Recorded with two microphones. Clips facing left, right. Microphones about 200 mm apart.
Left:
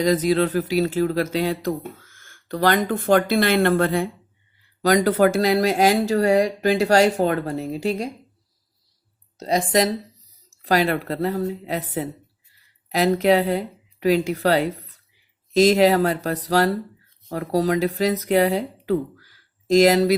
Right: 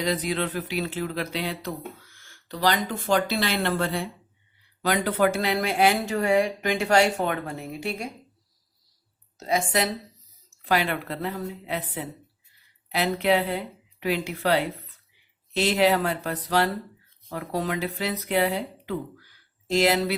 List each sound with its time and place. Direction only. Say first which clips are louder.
0.0 s speech: left 8 dB; 40° left (ahead or behind)
4.8 s speech: left 6 dB; 40° left (ahead or behind)
9.4 s speech: left 5 dB; 35° left (ahead or behind)